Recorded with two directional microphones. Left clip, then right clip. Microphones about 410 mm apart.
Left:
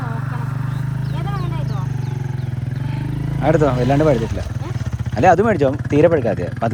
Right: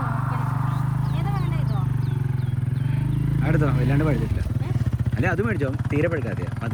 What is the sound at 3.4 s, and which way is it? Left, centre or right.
Speech, centre.